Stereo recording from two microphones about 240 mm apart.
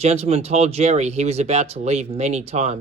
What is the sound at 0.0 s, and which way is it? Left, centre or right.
Speech, right.